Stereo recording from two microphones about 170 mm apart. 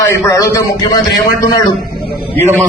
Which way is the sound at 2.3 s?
15° left (ahead or behind).